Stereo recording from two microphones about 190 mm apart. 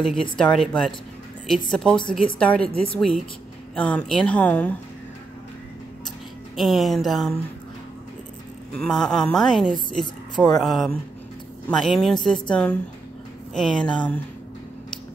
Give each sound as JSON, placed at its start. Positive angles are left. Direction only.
{"t": 0.0, "sound": "a woman's voice", "side_deg": 0}
{"t": 2.0, "sound": "speech", "side_deg": 25}
{"t": 2.3, "sound": "a woman's voice", "side_deg": 5}
{"t": 6.5, "sound": "a woman's voice", "side_deg": 0}
{"t": 8.7, "sound": "a woman's voice", "side_deg": 5}